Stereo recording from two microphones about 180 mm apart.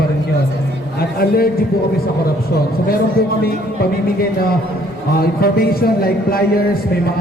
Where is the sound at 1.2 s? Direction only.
55° left (ahead or behind).